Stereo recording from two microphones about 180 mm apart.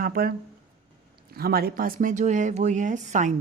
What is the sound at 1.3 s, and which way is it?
Speech, 60° right (ahead or behind).